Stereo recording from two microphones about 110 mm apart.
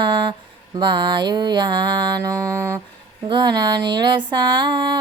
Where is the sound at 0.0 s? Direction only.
45° right (ahead or behind); by 2.8 s 25° right (ahead or behind).